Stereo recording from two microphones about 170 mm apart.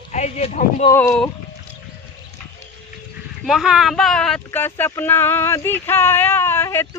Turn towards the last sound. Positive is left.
turn(degrees=15)  # may be behind; listen again after turning